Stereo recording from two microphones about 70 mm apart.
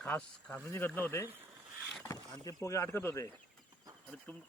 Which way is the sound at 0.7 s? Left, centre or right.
Left.